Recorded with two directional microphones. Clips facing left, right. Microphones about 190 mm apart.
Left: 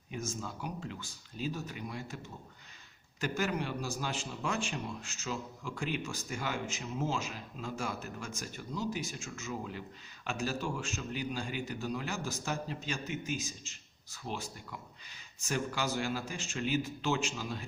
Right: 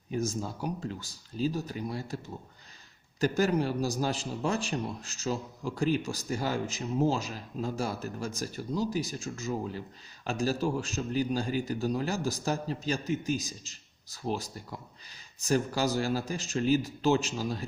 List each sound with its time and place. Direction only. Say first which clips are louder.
0.1 s a man's voice: right 8 dB; 35° right (ahead or behind)